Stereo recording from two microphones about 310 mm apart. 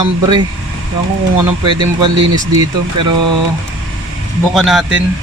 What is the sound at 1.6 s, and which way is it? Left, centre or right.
Speech, centre.